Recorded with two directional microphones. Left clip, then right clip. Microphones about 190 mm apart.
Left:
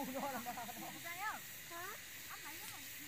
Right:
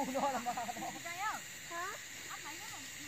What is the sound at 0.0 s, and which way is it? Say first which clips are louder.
Snake: right 8 dB; 50° right (ahead or behind).